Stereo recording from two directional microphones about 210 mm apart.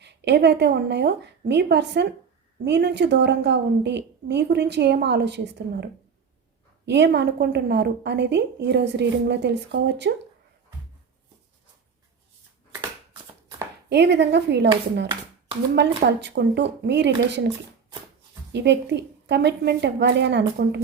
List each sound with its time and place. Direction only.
0.0 s a woman's voice: 55° right (ahead or behind)
13.9 s a woman's voice: 55° right (ahead or behind)
15.7 s a woman's voice: 55° right (ahead or behind)
18.5 s a woman's voice: 55° right (ahead or behind)